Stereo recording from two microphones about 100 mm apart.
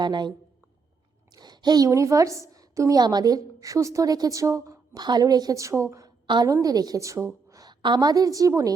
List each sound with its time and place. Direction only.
0.0 s speech: 50° right (ahead or behind)
1.4 s a woman's voice: 45° right (ahead or behind)
6.2 s a woman's voice: 45° right (ahead or behind)